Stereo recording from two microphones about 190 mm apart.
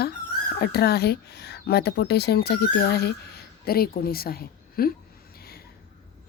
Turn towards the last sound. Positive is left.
turn(degrees=55)  # may be behind; listen again after turning